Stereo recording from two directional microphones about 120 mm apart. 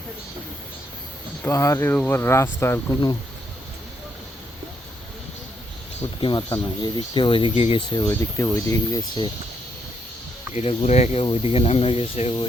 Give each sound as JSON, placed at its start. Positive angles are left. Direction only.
{"t": 1.5, "sound": "speech", "side_deg": 25}
{"t": 6.1, "sound": "speech", "side_deg": 40}
{"t": 8.1, "sound": "speech", "side_deg": 20}
{"t": 10.5, "sound": "speech", "side_deg": 65}
{"t": 11.2, "sound": "speech", "side_deg": 50}